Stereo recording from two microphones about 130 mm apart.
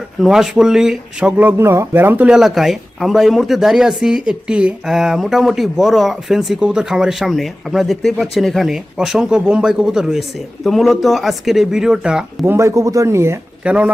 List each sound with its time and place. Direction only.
0.2 s speech: 5° right (ahead or behind)
12.5 s speech: 25° right (ahead or behind)
13.7 s speech: 10° right (ahead or behind)